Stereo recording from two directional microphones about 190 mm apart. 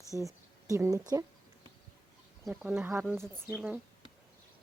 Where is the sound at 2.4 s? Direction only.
5° right (ahead or behind).